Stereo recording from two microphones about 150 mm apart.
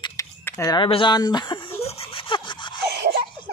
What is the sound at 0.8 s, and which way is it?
Speech, 35° left (ahead or behind).